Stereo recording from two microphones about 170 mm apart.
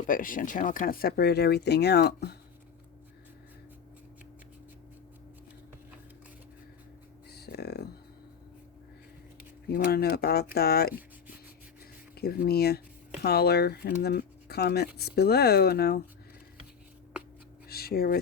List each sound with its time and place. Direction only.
0.1 s speech: 55° left (ahead or behind); by 2.3 s 70° left (ahead or behind)
7.3 s a sound: 70° left (ahead or behind)
9.6 s speech: 65° left (ahead or behind)
12.1 s speech: 65° left (ahead or behind)
17.2 s a sound: 5° right (ahead or behind)
17.7 s speech: 65° left (ahead or behind)